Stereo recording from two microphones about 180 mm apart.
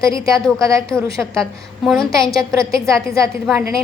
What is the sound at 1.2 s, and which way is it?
Speech, centre (ahead or behind).